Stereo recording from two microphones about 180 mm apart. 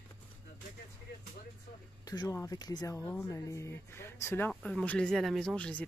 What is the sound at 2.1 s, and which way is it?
Speech, 20° left (ahead or behind).